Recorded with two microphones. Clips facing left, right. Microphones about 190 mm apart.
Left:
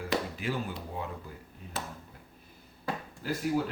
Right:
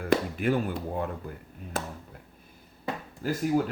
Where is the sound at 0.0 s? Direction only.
55° right (ahead or behind).